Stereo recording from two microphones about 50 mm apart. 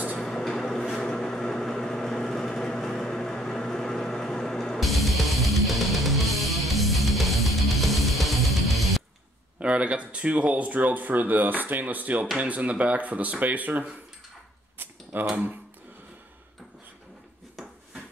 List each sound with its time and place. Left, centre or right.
0.2 s a sound: centre
0.9 s vehicle: centre
4.7 s music: centre
9.6 s speech: right
14.8 s scissors: right